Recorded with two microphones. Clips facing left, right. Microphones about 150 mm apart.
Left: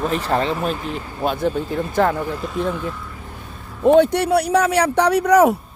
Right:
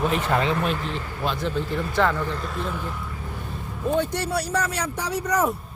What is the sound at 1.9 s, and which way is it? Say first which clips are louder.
Speech: left 4 dB; 45° left (ahead or behind).